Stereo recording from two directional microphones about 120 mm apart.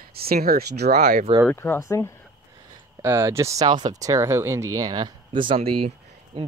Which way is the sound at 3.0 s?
20° right (ahead or behind).